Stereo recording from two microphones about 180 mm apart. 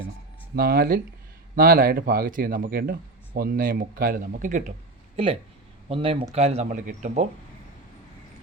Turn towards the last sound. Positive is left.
turn(degrees=-45)  # may be behind; listen again after turning